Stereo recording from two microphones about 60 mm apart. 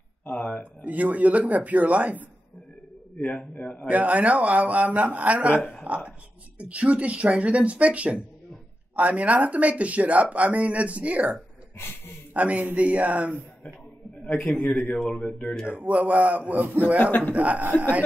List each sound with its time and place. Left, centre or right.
0.2 s a sound: left
0.8 s speech: right
3.2 s a man's voice: left
3.8 s speech: right
12.4 s speech: right
14.2 s a man's voice: centre
14.5 s a man's voice: left
15.6 s speech: right
17.0 s a man's voice: left
17.3 s speech: right